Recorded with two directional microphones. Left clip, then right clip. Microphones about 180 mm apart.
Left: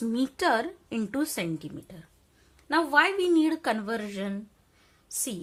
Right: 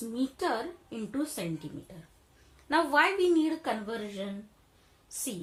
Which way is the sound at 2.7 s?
25° left (ahead or behind).